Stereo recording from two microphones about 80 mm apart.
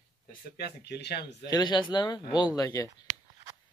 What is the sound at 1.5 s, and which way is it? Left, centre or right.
Speech, left.